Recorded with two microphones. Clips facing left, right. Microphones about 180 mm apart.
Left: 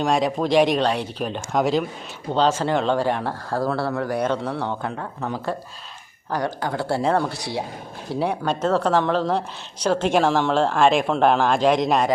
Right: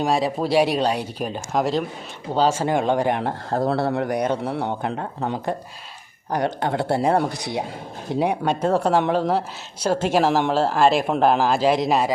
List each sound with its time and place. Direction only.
0.0 s speech: 5° right (ahead or behind); by 4.9 s 20° right (ahead or behind)
4.9 s a man's voice: 35° right (ahead or behind); by 12.1 s 5° right (ahead or behind)